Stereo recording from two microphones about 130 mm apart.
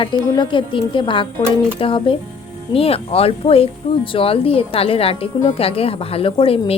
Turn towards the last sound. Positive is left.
turn(degrees=45)  # may be behind; listen again after turning